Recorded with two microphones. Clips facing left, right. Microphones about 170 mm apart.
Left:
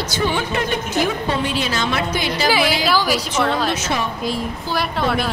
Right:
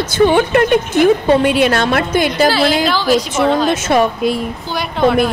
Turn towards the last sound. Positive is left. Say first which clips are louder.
# right 7 dB
turn(degrees=0)  # may be behind; listen again after turning